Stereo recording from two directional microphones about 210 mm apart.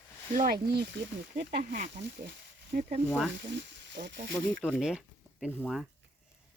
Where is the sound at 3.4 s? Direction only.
60° right (ahead or behind).